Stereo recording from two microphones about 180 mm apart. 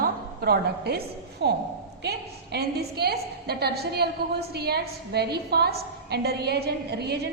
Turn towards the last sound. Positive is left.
turn(degrees=-65)  # may be behind; listen again after turning